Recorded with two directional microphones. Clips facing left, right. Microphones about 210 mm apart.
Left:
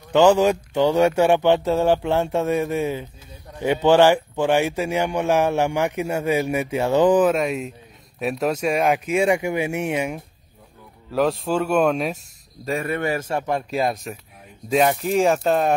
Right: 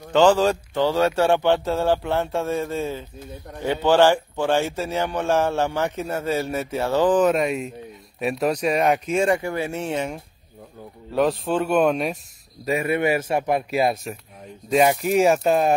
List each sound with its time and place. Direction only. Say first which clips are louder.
0.1 s speech: left 1 dB; 15° left (ahead or behind)
7.2 s speech: even; centre (ahead or behind)
9.1 s a man's voice: left 1 dB; 10° left (ahead or behind); by 15.3 s 15° right (ahead or behind)
15.3 s speech: right 1 dB; centre (ahead or behind)